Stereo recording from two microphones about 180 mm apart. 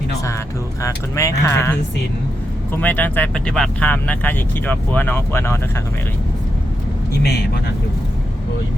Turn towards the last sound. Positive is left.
turn(degrees=65)  # may be behind; listen again after turning